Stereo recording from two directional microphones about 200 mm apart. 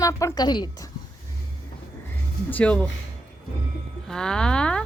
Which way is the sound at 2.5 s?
5° left (ahead or behind).